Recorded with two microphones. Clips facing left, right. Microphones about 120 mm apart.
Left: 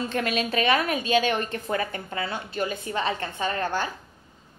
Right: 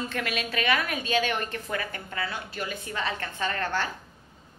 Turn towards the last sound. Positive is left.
turn(degrees=15)  # may be behind; listen again after turning